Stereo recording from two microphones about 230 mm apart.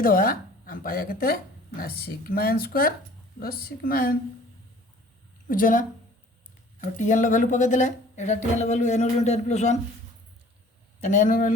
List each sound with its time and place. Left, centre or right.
0.0 s a woman's voice: left
5.5 s a woman's voice: left
11.0 s a woman's voice: left